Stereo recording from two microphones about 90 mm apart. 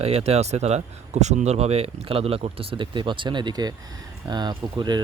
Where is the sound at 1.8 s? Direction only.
90° right.